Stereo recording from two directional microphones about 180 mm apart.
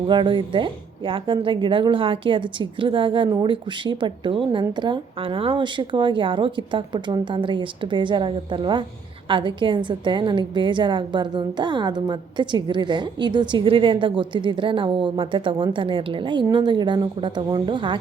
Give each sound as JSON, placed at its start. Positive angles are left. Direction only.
{"t": 0.1, "sound": "a woman's voice", "side_deg": -25}